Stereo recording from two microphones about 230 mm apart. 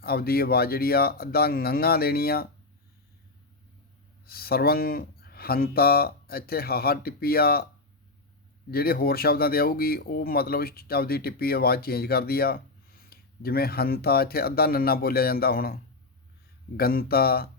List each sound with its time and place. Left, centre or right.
0.0 s speech: left
4.3 s speech: left
8.7 s speech: left
16.7 s speech: left